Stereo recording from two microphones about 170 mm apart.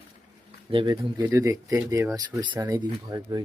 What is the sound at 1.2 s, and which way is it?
Speech, 15° right (ahead or behind).